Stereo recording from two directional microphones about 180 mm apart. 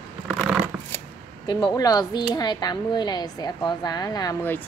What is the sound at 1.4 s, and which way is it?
Speech, 25° left (ahead or behind).